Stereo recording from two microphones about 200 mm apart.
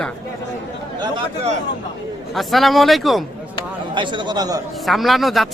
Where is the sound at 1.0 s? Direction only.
25° right (ahead or behind).